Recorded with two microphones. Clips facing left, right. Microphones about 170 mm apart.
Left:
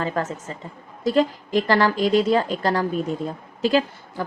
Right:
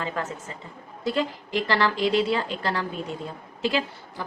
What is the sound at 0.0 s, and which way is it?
A woman's voice, 40° left (ahead or behind).